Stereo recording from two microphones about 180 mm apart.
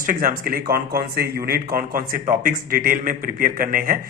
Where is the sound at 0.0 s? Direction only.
50° right (ahead or behind).